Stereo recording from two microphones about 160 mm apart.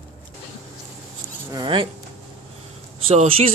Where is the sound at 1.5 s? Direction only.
30° right (ahead or behind).